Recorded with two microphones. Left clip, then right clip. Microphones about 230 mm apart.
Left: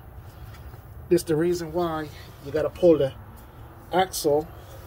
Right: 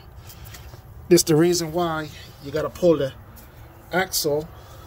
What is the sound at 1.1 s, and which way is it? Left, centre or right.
Speech, right.